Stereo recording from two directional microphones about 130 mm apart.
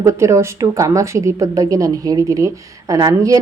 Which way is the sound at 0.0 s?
20° right (ahead or behind).